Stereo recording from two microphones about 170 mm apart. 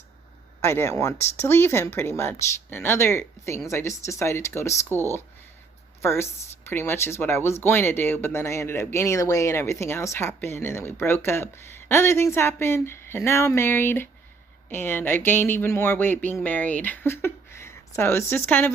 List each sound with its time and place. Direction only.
0.6 s speech: 15° left (ahead or behind)
6.0 s speech: 15° left (ahead or behind)